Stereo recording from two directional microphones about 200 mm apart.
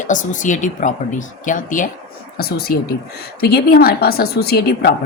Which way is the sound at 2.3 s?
50° left (ahead or behind).